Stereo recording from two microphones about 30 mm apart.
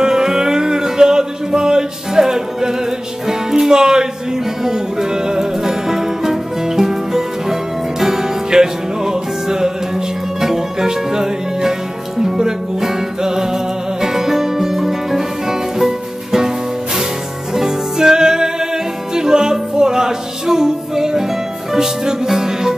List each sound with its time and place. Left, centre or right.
0.0 s music: centre